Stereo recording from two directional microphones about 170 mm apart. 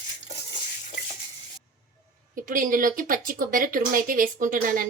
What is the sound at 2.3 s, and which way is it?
Speech, 55° right (ahead or behind).